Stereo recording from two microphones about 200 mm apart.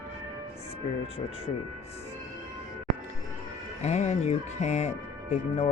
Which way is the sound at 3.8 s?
35° left (ahead or behind).